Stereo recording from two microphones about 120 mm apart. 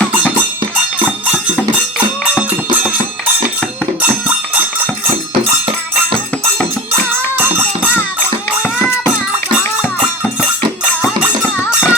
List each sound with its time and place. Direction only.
11.5 s music: 20° left (ahead or behind)